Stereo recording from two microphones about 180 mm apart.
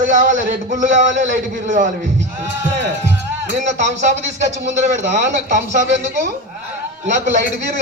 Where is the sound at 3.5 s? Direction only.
40° right (ahead or behind).